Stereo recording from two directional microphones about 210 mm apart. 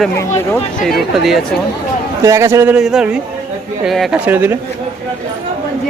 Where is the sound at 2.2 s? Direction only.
15° right (ahead or behind).